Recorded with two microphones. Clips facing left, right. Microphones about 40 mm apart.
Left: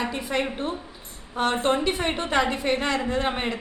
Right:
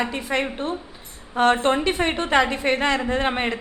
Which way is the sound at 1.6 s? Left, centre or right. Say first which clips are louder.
Right 3 dB; centre.